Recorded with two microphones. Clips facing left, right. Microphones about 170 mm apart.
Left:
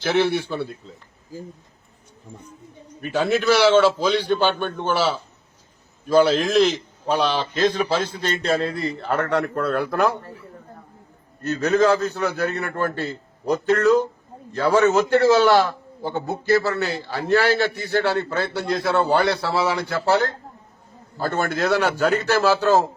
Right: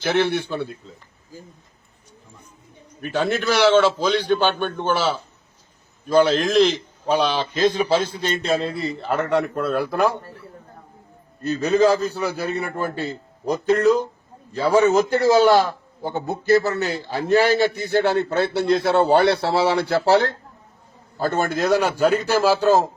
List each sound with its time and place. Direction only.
0.0 s a man's voice: centre (ahead or behind)
3.0 s a man's voice: centre (ahead or behind)
11.4 s a man's voice: 10° right (ahead or behind); by 20.3 s 35° right (ahead or behind)
21.2 s a man's voice: 20° right (ahead or behind)